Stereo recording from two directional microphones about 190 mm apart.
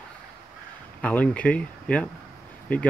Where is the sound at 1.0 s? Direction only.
5° left (ahead or behind).